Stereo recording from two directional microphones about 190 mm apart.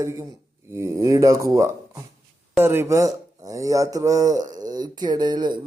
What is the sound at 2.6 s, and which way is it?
Speech, 10° right (ahead or behind).